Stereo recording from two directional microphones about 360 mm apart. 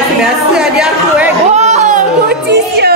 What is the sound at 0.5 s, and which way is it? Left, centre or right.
Chatter, centre.